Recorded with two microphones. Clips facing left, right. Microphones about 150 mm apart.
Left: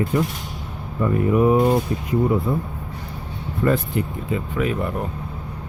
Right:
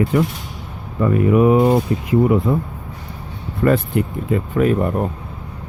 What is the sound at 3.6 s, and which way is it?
Speech, 60° right (ahead or behind).